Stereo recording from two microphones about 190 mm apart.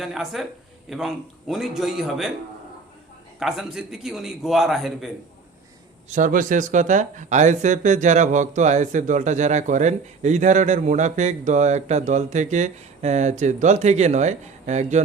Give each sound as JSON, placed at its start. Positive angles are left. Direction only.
{"t": 0.0, "sound": "a man's voice", "side_deg": 0}
{"t": 3.4, "sound": "a man's voice", "side_deg": 0}
{"t": 6.1, "sound": "speech", "side_deg": -45}